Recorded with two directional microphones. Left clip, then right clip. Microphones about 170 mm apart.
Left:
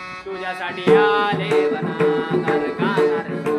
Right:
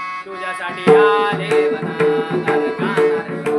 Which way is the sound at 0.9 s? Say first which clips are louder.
Right 3 dB; 15° left (ahead or behind).